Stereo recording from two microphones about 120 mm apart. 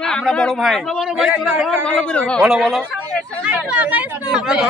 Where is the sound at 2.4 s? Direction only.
5° right (ahead or behind).